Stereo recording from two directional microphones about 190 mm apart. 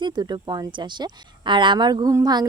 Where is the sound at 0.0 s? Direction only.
20° right (ahead or behind).